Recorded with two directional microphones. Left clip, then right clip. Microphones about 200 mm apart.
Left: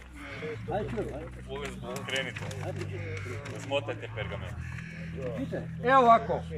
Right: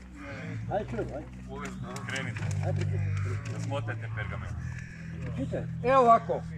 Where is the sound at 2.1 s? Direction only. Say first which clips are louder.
Left 3 dB; 30° left (ahead or behind).